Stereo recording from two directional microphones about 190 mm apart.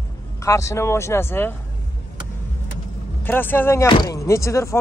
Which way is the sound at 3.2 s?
10° left (ahead or behind).